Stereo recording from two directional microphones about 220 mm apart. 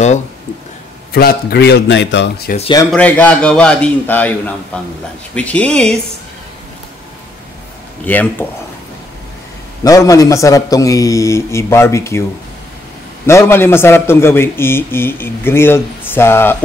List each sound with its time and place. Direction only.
1.1 s speech: 45° left (ahead or behind)
2.5 s speech: 20° left (ahead or behind)
2.9 s a man's voice: 5° left (ahead or behind)
8.0 s a man's voice: 10° left (ahead or behind)
9.8 s a man's voice: 15° left (ahead or behind)
13.3 s a man's voice: 10° left (ahead or behind)